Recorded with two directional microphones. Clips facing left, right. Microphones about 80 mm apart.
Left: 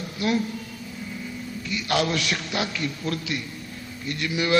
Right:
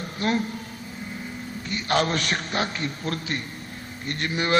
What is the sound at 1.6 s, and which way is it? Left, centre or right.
Mantra, right.